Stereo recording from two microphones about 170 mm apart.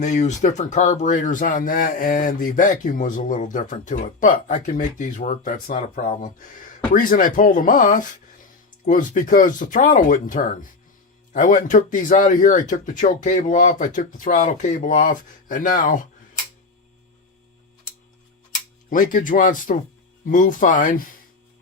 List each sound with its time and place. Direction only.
0.0 s speech: 45° left (ahead or behind)
18.9 s speech: 50° left (ahead or behind)